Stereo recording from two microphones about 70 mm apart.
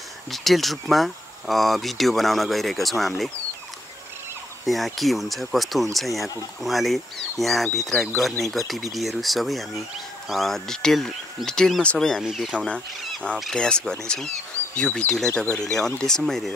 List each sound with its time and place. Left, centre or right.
0.3 s speech: centre
4.6 s speech: centre
12.2 s speech: centre
12.4 s speech: centre